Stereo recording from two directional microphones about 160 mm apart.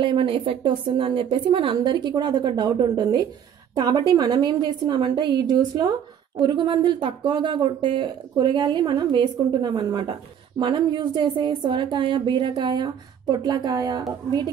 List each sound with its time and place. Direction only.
0.0 s a woman's voice: 30° right (ahead or behind)